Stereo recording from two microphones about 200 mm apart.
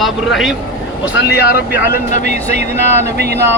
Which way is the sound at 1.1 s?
55° left (ahead or behind).